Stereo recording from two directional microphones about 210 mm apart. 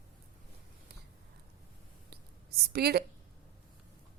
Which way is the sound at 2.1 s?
50° right (ahead or behind).